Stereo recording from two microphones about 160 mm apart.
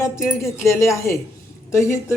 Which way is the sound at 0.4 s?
15° left (ahead or behind).